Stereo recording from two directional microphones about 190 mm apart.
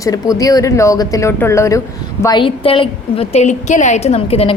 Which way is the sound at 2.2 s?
25° left (ahead or behind).